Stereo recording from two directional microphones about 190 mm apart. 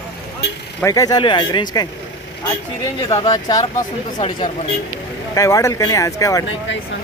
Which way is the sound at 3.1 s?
30° left (ahead or behind).